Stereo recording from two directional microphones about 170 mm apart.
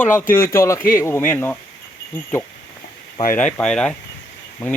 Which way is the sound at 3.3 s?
5° left (ahead or behind).